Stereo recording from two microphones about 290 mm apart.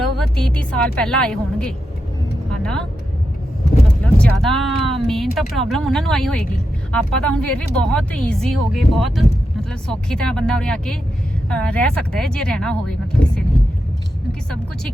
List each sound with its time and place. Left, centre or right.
0.0 s a woman's voice: centre
2.5 s vehicle: centre
4.4 s speech: centre